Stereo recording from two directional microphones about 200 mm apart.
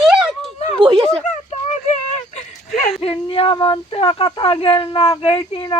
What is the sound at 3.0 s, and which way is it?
Speech, 30° left (ahead or behind).